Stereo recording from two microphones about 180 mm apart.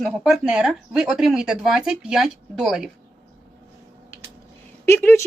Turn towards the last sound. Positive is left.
turn(degrees=10)  # may be behind; listen again after turning